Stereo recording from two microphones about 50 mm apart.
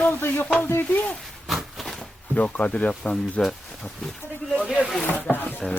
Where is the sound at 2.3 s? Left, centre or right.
Left.